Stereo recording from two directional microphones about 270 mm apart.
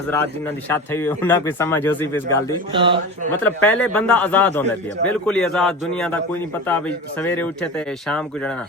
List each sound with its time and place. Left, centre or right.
0.7 s speech: centre
2.7 s speech: centre
3.4 s speech: centre